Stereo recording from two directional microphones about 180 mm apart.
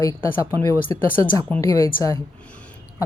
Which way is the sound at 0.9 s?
20° left (ahead or behind).